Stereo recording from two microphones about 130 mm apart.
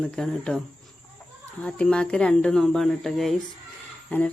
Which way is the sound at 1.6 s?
10° left (ahead or behind).